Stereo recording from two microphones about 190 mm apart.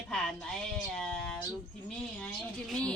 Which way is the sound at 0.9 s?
5° left (ahead or behind).